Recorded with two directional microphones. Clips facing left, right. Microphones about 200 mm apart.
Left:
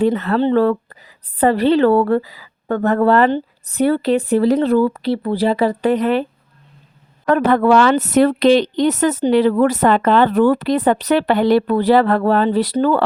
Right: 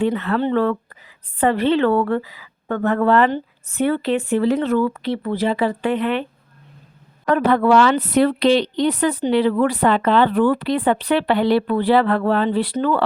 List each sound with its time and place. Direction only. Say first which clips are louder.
0.0 s a woman's voice: left 4 dB; 40° left (ahead or behind)
7.3 s speech: left 2 dB; 45° left (ahead or behind)